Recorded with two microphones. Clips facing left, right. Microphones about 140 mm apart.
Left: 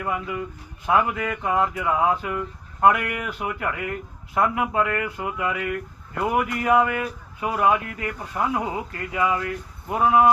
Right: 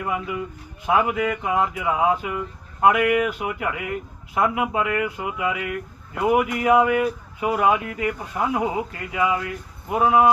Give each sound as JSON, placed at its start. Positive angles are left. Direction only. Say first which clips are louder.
{"t": 0.0, "sound": "speech", "louder": "right 1 dB", "side_deg": -20}